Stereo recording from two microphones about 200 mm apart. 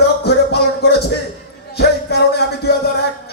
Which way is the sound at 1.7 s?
55° left (ahead or behind).